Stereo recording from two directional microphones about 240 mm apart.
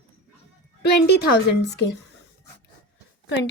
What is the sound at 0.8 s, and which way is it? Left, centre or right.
Speech, left.